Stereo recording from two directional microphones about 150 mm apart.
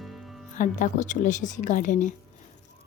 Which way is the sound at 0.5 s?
55° left (ahead or behind).